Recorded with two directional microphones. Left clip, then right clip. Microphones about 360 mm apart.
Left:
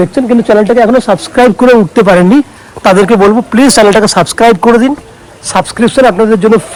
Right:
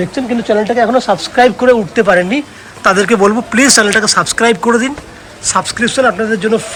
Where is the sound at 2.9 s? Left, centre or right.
Centre.